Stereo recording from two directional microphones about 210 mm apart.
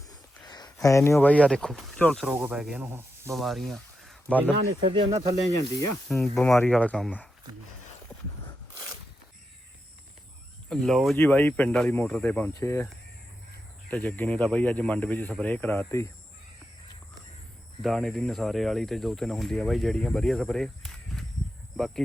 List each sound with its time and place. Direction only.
0.1 s a sound: 20° left (ahead or behind)
1.1 s speech: 5° left (ahead or behind); by 3.3 s 10° right (ahead or behind)
3.3 s speech: centre (ahead or behind)
4.9 s speech: 25° right (ahead or behind)
6.1 s speech: centre (ahead or behind)
10.7 s speech: centre (ahead or behind)
17.8 s speech: centre (ahead or behind)